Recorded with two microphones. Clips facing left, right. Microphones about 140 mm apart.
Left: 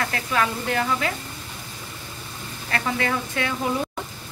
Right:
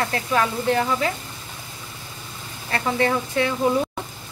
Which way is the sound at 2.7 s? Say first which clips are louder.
Right 3 dB; 30° right (ahead or behind).